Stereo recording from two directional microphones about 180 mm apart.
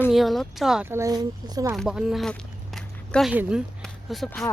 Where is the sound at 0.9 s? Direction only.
15° right (ahead or behind).